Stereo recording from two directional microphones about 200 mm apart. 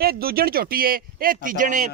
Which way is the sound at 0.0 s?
50° right (ahead or behind).